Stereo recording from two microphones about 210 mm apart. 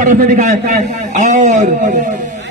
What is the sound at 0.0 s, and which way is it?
A man's voice, 40° right (ahead or behind).